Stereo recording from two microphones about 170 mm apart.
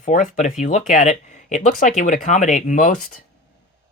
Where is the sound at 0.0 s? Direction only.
45° left (ahead or behind).